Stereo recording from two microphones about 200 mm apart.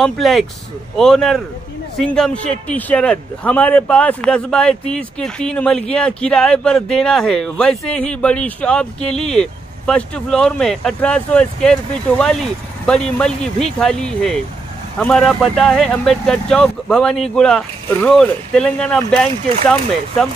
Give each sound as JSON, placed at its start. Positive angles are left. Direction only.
{"t": 0.0, "sound": "a man's voice", "side_deg": 0}